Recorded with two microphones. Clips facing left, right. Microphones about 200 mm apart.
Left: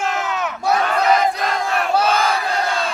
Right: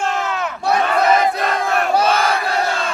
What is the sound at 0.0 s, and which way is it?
Crowd, centre (ahead or behind).